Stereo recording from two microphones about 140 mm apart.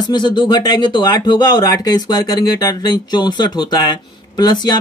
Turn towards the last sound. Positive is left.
turn(degrees=30)  # may be behind; listen again after turning